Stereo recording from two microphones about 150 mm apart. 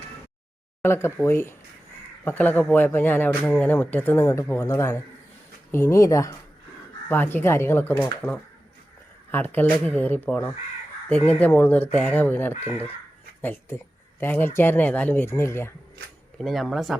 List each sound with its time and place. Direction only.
0.8 s speech: 15° left (ahead or behind)
9.3 s speech: 15° left (ahead or behind)
16.4 s speech: centre (ahead or behind)